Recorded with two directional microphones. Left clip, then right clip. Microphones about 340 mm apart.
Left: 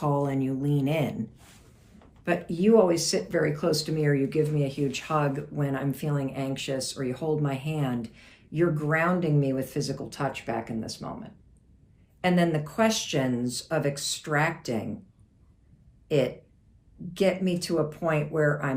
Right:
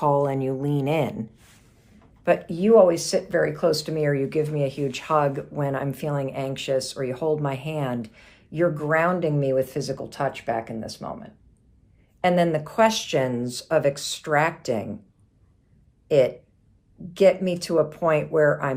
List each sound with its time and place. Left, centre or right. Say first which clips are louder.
0.0 s speech: right 6 dB; centre
16.0 s speech: right 7 dB; centre